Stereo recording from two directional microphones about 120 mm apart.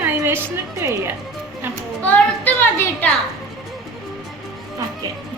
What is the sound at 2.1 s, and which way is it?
A child's voice, 15° left (ahead or behind).